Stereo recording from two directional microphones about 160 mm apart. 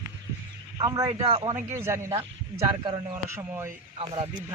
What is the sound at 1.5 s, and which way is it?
Speech, 15° right (ahead or behind).